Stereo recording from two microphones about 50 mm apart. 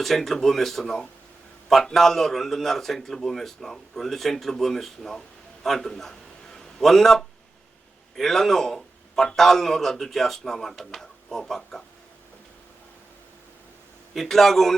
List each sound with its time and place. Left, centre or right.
0.0 s a man's voice: centre
14.1 s a man's voice: centre